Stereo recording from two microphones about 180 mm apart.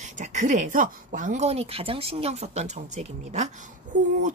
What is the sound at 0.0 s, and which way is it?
Speech, 40° right (ahead or behind).